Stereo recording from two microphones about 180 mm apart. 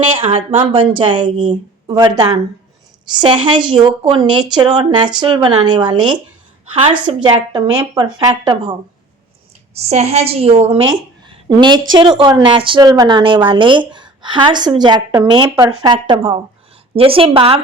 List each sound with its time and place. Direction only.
0.0 s speech: 30° right (ahead or behind)
9.7 s a woman's voice: 35° right (ahead or behind)